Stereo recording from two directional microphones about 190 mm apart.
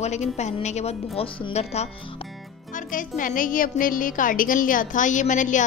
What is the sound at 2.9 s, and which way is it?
A woman's voice, 45° left (ahead or behind).